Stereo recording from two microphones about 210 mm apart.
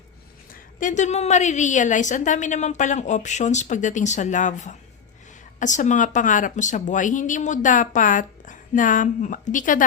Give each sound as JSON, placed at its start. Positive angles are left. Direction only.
{"t": 0.5, "sound": "a woman's voice", "side_deg": 40}